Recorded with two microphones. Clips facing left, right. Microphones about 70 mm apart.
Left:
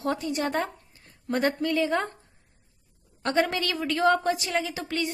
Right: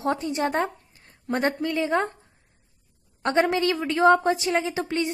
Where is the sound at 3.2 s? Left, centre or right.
Right.